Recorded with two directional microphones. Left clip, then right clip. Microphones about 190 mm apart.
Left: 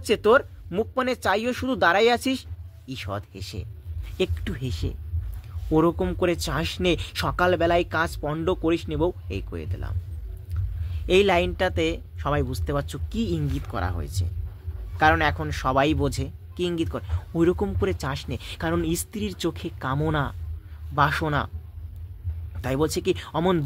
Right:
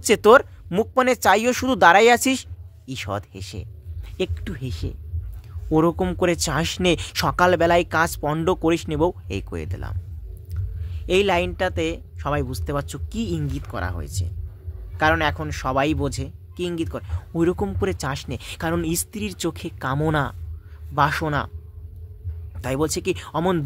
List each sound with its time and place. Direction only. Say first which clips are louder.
0.0 s speech: right 5 dB; 45° right (ahead or behind)
3.4 s speech: right 1 dB; 15° right (ahead or behind)
5.7 s speech: right 2 dB; 20° right (ahead or behind)
10.5 s speech: even; 15° right (ahead or behind)
22.6 s speech: right 1 dB; 15° right (ahead or behind)